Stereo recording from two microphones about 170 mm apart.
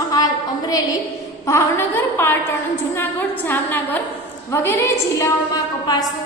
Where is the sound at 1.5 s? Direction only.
15° left (ahead or behind).